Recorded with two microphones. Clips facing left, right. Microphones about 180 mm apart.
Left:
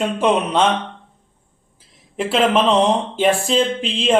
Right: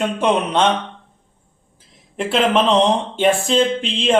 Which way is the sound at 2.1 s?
5° left (ahead or behind).